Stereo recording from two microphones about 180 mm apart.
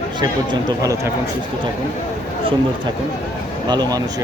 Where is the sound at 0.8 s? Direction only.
20° right (ahead or behind).